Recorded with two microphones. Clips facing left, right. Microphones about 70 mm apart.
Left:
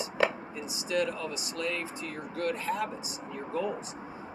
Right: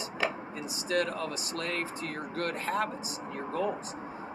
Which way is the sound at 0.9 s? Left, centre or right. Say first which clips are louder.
Even; right.